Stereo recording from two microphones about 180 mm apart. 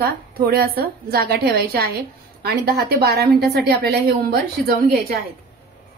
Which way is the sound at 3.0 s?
60° right (ahead or behind).